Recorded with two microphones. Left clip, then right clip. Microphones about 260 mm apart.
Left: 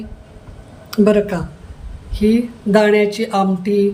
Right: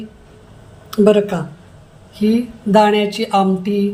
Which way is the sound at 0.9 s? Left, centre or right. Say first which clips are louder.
Right 2 dB; centre.